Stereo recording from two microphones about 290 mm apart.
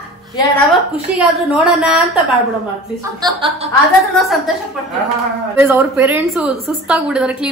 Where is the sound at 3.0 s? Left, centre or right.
Centre.